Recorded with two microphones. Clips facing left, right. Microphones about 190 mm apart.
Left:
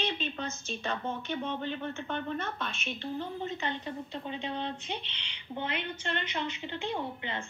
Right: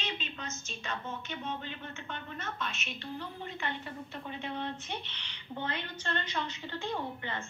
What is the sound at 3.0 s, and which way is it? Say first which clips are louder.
A woman's voice: left 6 dB; 20° left (ahead or behind).